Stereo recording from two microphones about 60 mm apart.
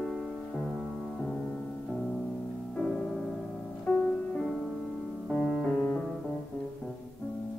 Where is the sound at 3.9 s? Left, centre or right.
Left.